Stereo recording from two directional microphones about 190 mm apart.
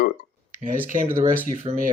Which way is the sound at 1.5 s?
45° right (ahead or behind).